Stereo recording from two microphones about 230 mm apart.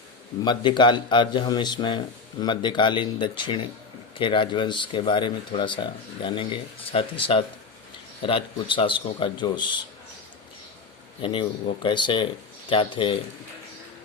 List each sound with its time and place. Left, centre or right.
0.4 s speech: centre
11.2 s speech: left